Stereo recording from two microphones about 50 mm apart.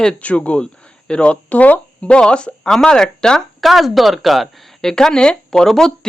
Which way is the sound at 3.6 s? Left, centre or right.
Centre.